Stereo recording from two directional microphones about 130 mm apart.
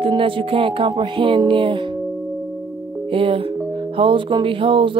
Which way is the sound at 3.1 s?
45° right (ahead or behind).